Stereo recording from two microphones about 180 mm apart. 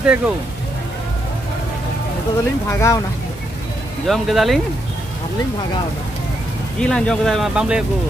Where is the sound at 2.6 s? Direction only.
15° left (ahead or behind).